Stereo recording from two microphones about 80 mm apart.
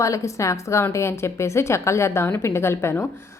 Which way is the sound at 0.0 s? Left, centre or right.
Left.